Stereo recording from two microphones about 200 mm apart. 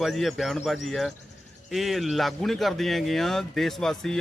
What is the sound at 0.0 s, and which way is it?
Speech, centre (ahead or behind).